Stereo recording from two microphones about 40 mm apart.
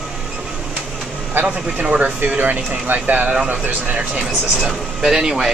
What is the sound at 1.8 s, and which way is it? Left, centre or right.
Speech, right.